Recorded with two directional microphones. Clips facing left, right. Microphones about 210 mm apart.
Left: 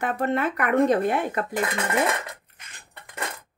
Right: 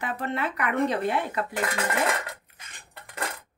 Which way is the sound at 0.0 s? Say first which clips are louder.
Left 5 dB; 50° left (ahead or behind).